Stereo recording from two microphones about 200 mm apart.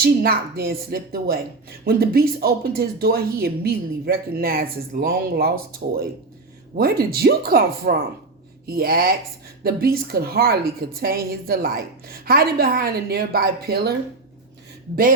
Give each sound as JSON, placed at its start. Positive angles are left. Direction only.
{"t": 0.0, "sound": "speech", "side_deg": -50}
{"t": 6.7, "sound": "speech", "side_deg": -50}